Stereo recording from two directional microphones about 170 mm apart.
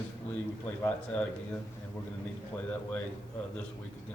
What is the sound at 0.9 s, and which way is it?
Speech, 10° left (ahead or behind).